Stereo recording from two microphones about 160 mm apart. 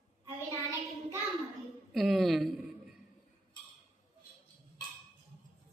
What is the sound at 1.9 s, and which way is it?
Speech, centre (ahead or behind).